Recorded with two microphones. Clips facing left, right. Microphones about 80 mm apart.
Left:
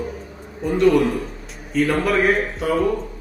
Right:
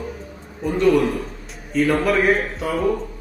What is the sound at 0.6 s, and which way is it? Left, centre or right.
A man's voice, centre.